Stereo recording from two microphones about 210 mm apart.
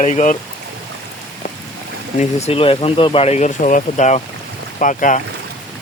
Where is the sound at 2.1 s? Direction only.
30° left (ahead or behind).